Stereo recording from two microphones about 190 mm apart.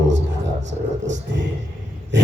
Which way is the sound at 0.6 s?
70° right (ahead or behind).